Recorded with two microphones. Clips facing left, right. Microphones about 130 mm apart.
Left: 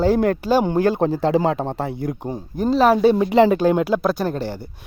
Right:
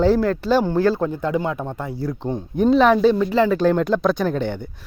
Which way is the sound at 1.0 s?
90° left.